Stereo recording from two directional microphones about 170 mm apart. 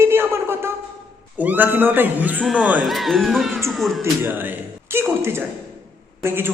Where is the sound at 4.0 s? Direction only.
10° right (ahead or behind).